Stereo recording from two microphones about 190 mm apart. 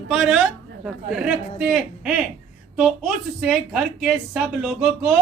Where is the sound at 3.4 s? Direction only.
5° right (ahead or behind).